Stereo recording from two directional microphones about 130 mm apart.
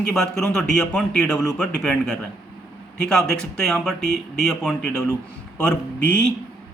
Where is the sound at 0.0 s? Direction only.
5° left (ahead or behind).